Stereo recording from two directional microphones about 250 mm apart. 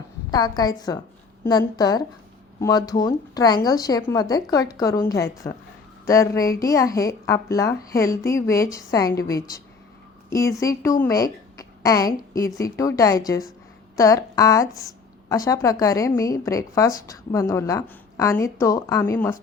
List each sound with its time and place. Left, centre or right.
0.3 s a woman's voice: centre